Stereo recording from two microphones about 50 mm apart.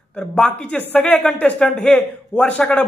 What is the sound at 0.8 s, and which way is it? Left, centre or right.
Speech, left.